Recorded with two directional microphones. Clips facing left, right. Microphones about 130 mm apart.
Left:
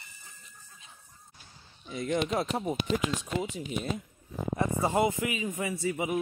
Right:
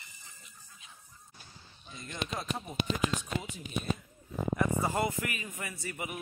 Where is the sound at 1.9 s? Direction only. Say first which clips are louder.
Left 10 dB; 90° left.